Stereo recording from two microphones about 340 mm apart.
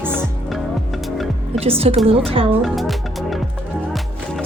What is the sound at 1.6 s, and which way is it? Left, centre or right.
Speech, centre.